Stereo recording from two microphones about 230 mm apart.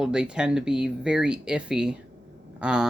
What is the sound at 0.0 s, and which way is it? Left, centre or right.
Speech, centre.